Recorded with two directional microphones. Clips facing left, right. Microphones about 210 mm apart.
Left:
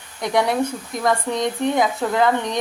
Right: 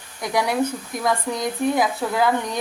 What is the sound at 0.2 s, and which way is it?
Speech, centre (ahead or behind).